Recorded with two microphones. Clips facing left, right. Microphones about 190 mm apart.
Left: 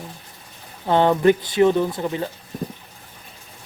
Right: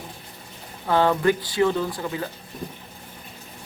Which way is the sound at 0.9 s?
20° left (ahead or behind).